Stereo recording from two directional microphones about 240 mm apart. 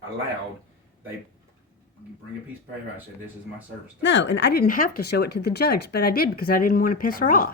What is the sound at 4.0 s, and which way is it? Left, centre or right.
Speech, left.